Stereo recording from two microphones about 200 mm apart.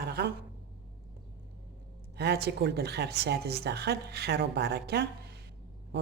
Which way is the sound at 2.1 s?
55° right (ahead or behind).